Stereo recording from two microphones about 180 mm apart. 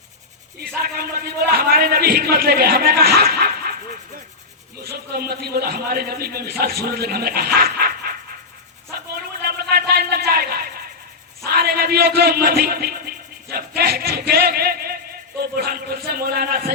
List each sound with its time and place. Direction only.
0.6 s speech: 55° right (ahead or behind)
4.8 s speech: 55° right (ahead or behind)
8.9 s a sound: 60° right (ahead or behind)
15.5 s speech: 60° right (ahead or behind)